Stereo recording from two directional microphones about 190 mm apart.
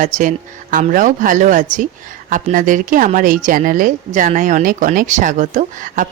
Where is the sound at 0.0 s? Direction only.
40° right (ahead or behind).